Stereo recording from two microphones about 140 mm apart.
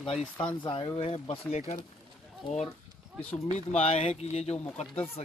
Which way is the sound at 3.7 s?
50° left (ahead or behind).